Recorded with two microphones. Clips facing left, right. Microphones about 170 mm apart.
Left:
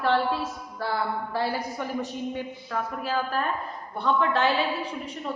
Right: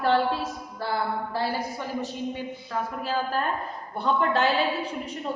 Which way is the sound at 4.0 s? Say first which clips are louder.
Even; 35° right (ahead or behind).